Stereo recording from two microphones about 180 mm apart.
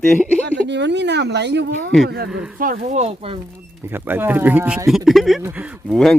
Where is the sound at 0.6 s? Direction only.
75° right (ahead or behind).